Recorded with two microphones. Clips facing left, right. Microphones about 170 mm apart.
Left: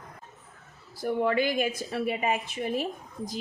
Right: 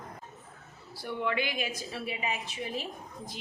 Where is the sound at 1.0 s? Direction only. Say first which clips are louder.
Left 7 dB; 40° left (ahead or behind).